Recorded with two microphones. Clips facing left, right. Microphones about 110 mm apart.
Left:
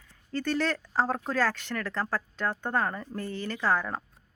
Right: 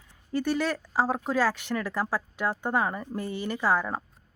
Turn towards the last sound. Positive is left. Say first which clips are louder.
# right 2 dB
turn(degrees=-10)  # may be behind; listen again after turning